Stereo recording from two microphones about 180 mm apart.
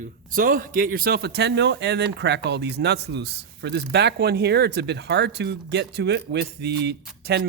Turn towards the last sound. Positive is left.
turn(degrees=-65)  # may be behind; listen again after turning